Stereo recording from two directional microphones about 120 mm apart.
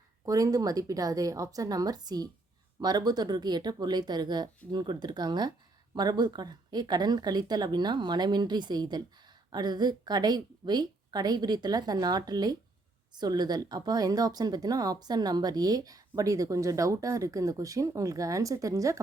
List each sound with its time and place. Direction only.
0.3 s a woman's voice: 30° right (ahead or behind)